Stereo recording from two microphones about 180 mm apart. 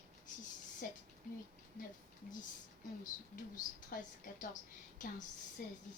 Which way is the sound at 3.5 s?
45° left (ahead or behind).